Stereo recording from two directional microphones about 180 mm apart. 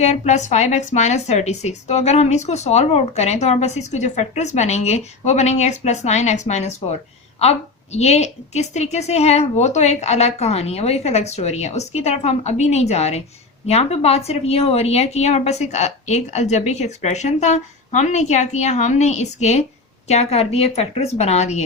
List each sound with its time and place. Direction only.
0.0 s speech: 40° left (ahead or behind)